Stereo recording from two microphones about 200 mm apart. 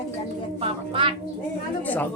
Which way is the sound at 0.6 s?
25° right (ahead or behind).